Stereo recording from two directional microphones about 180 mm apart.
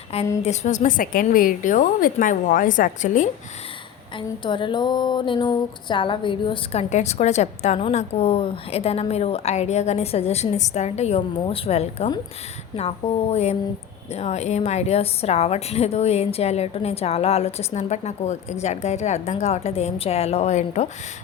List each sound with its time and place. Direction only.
0.4 s a woman's voice: 40° left (ahead or behind)
4.4 s a sound: 25° left (ahead or behind)
6.9 s a woman's voice: 40° left (ahead or behind)